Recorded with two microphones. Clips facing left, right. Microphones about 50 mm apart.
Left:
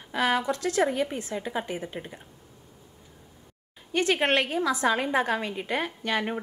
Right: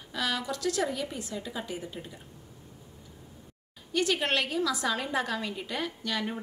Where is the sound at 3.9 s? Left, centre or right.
Left.